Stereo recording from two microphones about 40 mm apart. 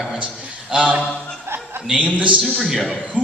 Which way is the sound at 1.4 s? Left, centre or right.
Right.